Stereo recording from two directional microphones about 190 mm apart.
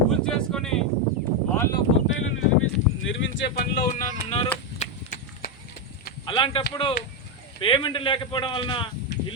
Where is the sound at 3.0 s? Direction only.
80° left; by 4.1 s 50° left (ahead or behind).